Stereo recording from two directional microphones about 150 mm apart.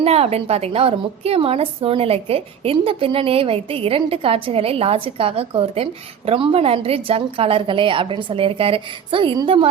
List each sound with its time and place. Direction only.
0.0 s a woman's voice: 45° right (ahead or behind)